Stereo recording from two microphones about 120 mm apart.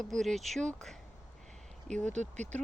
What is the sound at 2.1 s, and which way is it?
Speech, 70° right (ahead or behind).